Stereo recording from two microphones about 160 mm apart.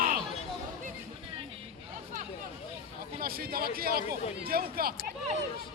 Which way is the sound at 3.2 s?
70° right (ahead or behind).